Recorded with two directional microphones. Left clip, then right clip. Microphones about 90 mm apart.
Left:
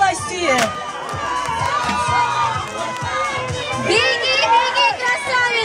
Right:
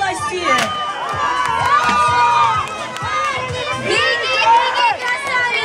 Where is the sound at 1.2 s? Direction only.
25° right (ahead or behind).